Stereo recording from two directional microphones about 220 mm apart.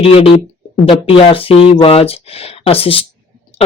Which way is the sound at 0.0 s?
25° left (ahead or behind).